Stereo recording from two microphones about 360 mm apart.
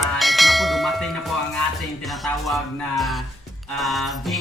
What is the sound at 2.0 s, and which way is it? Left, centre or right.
Speech, centre.